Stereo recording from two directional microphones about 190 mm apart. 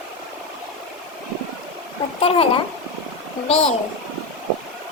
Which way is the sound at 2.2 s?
30° left (ahead or behind).